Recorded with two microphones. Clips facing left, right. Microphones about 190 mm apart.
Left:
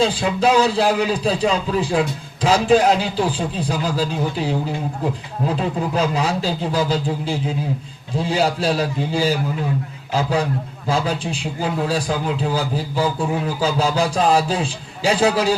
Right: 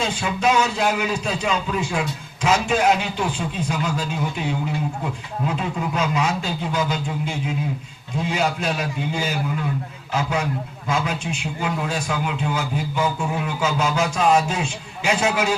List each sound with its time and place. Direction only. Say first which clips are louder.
0.0 s a man's voice: left 5 dB; 35° left (ahead or behind)